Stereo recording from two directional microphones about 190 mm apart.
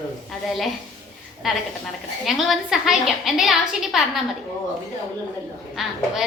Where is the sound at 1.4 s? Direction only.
Centre (ahead or behind).